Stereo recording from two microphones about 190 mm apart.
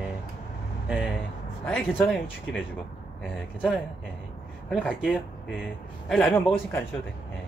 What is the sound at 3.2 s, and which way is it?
Speech, 5° left (ahead or behind).